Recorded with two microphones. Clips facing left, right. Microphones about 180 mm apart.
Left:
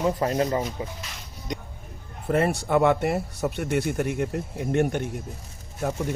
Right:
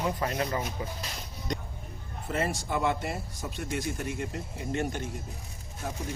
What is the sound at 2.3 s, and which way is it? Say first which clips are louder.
Speech: left 8 dB; 60° left (ahead or behind).